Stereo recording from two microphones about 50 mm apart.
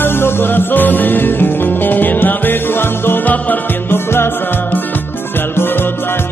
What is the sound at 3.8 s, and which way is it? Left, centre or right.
Music, left.